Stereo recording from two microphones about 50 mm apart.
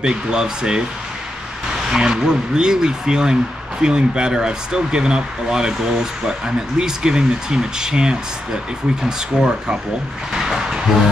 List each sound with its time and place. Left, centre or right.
0.0 s speech: centre
1.9 s speech: centre
9.4 s speech: centre
10.3 s a sound: centre